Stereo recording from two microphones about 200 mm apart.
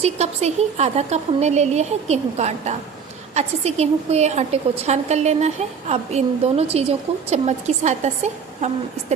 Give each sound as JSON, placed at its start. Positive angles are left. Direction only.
{"t": 0.0, "sound": "a woman's voice", "side_deg": -35}